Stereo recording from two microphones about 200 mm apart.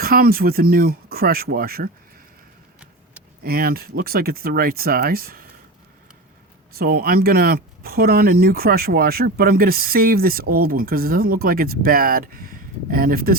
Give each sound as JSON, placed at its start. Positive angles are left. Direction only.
{"t": 0.0, "sound": "speech", "side_deg": -50}
{"t": 3.4, "sound": "speech", "side_deg": -50}
{"t": 6.7, "sound": "speech", "side_deg": -50}